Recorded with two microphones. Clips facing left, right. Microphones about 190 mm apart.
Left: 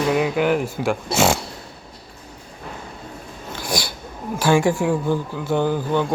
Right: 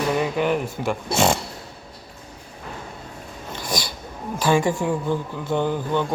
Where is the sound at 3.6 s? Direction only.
10° left (ahead or behind).